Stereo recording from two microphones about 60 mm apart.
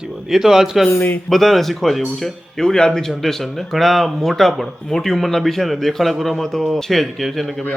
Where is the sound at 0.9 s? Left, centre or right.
Left.